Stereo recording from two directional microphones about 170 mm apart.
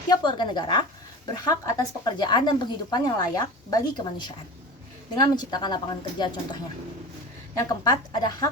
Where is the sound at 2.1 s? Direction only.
25° left (ahead or behind).